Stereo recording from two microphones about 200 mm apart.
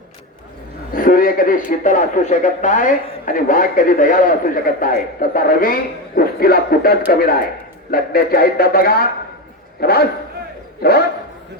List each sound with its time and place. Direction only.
0.9 s speech: 45° left (ahead or behind)